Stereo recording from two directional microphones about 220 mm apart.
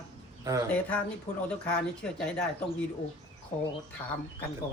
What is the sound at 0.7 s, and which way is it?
A woman's voice, 5° left (ahead or behind).